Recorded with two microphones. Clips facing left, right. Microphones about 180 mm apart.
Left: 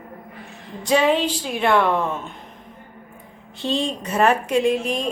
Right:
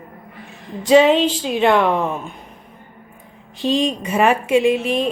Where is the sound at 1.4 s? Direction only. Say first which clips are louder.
Right 2 dB; 20° right (ahead or behind).